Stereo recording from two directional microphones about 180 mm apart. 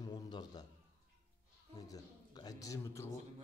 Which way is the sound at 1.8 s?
20° left (ahead or behind).